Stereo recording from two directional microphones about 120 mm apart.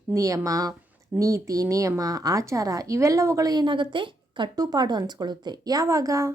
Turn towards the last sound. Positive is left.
turn(degrees=-30)  # may be behind; listen again after turning